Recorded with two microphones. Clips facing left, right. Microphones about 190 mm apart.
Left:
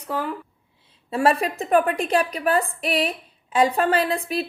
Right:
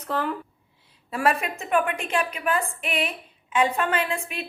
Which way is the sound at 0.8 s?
30° left (ahead or behind).